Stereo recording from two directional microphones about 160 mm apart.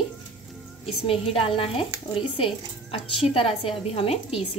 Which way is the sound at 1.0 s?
35° left (ahead or behind).